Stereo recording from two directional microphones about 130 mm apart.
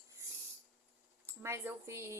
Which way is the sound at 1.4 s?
20° right (ahead or behind).